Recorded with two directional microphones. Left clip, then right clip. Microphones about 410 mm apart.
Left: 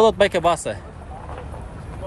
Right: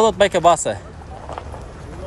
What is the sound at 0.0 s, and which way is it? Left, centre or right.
Speech, centre.